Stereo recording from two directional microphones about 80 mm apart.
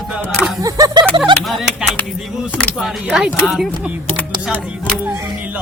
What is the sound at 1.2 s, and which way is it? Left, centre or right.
Music, centre.